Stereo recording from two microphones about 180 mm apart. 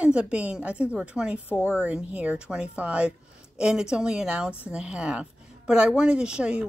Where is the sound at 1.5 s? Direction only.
10° left (ahead or behind).